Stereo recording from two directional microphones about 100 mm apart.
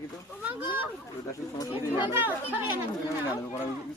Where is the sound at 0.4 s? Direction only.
20° right (ahead or behind).